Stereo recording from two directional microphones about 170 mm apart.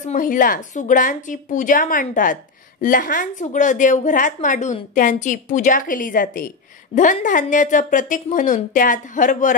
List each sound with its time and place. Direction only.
0.0 s speech: 50° left (ahead or behind)